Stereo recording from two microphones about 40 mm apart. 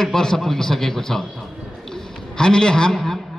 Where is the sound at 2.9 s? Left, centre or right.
Centre.